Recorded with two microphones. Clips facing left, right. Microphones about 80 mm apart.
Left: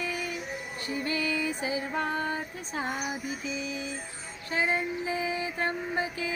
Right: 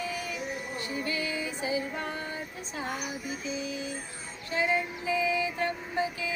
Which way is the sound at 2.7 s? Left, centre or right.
Left.